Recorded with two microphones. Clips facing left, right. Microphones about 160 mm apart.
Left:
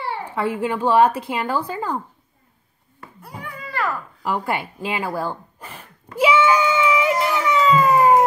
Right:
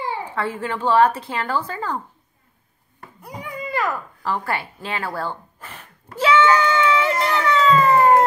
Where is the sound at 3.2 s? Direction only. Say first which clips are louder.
Right 4 dB; 15° right (ahead or behind).